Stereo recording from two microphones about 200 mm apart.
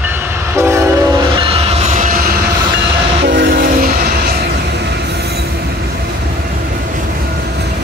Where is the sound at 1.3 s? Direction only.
25° right (ahead or behind).